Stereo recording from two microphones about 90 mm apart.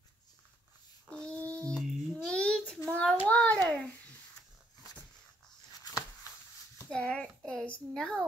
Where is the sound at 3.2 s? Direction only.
15° left (ahead or behind).